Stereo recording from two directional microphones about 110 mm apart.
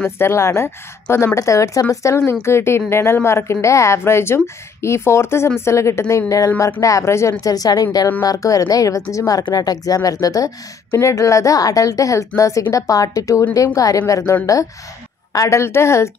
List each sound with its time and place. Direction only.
0.0 s a woman's voice: 25° left (ahead or behind)